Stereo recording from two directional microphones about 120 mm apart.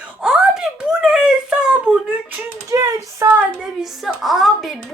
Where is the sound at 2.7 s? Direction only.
25° right (ahead or behind).